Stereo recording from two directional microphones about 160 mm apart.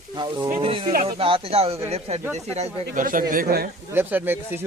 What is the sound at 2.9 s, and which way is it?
Speech, 60° right (ahead or behind).